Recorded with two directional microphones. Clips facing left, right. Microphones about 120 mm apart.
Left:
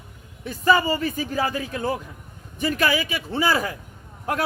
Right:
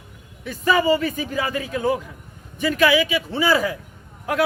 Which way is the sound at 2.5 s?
45° left (ahead or behind).